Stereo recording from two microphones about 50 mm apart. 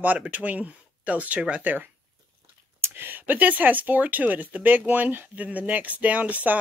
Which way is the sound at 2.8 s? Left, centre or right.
Right.